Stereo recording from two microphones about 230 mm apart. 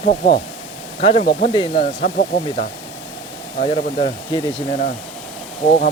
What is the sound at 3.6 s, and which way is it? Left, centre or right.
Speech, left.